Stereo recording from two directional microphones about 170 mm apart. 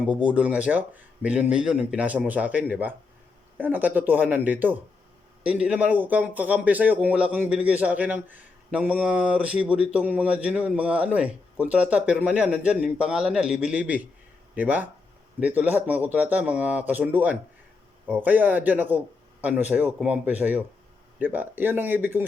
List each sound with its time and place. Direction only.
0.0 s speech: 5° right (ahead or behind)